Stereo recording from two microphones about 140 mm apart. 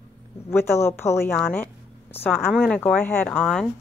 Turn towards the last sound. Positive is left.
turn(degrees=5)  # may be behind; listen again after turning